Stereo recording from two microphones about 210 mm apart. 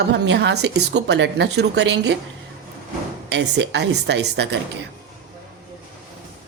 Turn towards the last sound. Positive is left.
turn(degrees=-55)  # may be behind; listen again after turning